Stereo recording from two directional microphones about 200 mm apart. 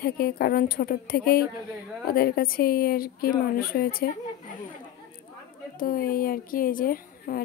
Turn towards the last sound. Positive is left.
turn(degrees=45)  # may be behind; listen again after turning